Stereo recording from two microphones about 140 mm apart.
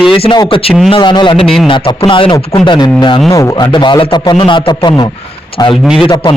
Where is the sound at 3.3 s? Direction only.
25° left (ahead or behind).